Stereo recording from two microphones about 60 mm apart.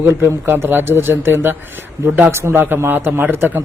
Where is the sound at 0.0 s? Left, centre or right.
Right.